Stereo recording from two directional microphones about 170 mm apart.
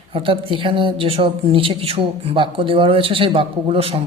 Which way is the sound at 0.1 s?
30° right (ahead or behind).